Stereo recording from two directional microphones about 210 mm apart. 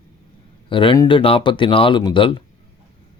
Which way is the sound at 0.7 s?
25° left (ahead or behind).